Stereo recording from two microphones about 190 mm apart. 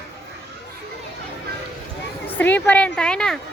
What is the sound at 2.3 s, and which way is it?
A woman's voice, 10° left (ahead or behind).